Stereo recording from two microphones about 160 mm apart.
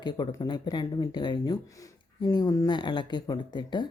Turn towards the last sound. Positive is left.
turn(degrees=30)  # may be behind; listen again after turning